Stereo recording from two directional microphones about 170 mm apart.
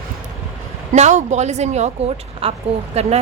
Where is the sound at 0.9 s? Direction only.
45° right (ahead or behind).